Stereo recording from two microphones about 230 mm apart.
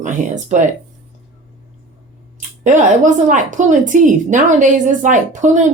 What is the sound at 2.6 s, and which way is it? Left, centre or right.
Speech, right.